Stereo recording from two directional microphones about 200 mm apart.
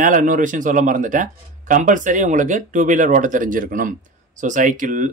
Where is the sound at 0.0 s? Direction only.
40° right (ahead or behind).